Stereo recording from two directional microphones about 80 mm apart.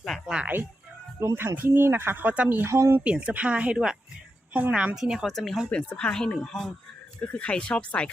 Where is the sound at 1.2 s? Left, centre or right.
Right.